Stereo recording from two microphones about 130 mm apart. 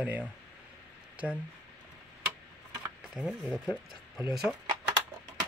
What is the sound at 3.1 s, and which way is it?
Speech, 5° right (ahead or behind).